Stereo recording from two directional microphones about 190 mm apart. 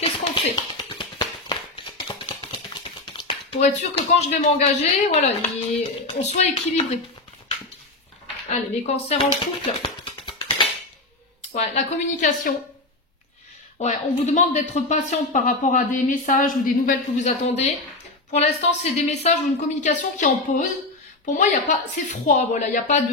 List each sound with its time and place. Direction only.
0.0 s tap: 25° left (ahead or behind)
6.0 s speech: 35° left (ahead or behind)
8.5 s speech: 35° left (ahead or behind)
9.8 s music: 25° left (ahead or behind)
11.5 s speech: 35° left (ahead or behind)
13.7 s speech: 40° left (ahead or behind)